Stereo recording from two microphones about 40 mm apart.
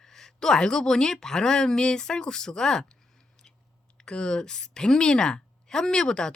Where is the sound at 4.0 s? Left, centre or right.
Left.